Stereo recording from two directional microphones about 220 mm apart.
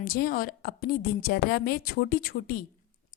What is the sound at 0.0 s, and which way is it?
A woman's voice, 40° left (ahead or behind).